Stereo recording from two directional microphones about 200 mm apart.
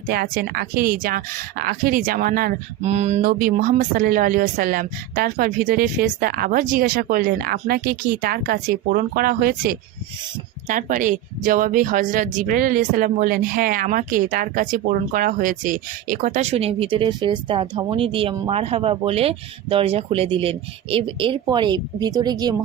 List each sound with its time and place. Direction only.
0.1 s speech: 50° right (ahead or behind)
2.8 s speech: 35° right (ahead or behind)